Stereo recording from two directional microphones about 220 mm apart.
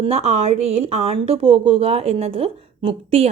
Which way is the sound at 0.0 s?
30° right (ahead or behind).